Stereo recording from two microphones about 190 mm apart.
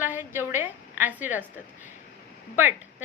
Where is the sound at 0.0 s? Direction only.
10° right (ahead or behind).